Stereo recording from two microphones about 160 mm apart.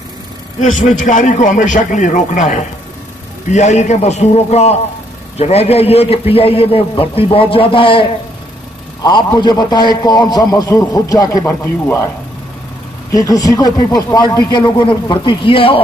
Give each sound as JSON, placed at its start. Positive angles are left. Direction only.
{"t": 0.6, "sound": "a man's voice", "side_deg": 50}
{"t": 13.1, "sound": "speech", "side_deg": 20}